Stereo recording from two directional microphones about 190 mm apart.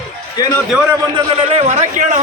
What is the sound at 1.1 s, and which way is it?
A woman's voice, 30° right (ahead or behind).